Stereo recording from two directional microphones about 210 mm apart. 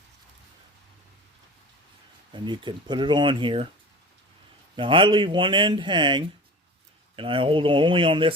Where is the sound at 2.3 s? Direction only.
20° right (ahead or behind).